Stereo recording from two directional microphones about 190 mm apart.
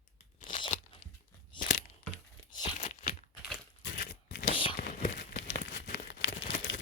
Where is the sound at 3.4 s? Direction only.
Centre (ahead or behind).